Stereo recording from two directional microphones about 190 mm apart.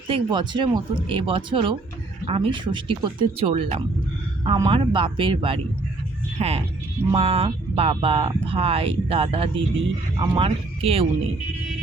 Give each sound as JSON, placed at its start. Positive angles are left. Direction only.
{"t": 0.1, "sound": "speech", "side_deg": -25}